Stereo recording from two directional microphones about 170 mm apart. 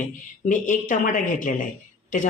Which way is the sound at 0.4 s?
50° left (ahead or behind).